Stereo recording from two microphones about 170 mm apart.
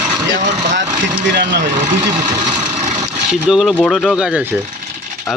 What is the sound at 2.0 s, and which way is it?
Speech, 20° right (ahead or behind).